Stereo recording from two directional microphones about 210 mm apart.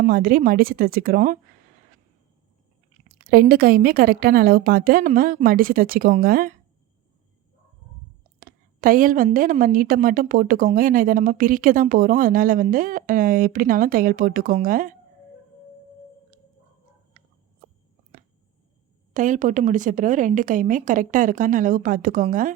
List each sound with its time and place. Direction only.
0.0 s a woman's voice: 45° right (ahead or behind)
3.2 s a woman's voice: 45° right (ahead or behind)
8.4 s a woman's voice: 40° right (ahead or behind)
19.1 s a woman's voice: 35° right (ahead or behind)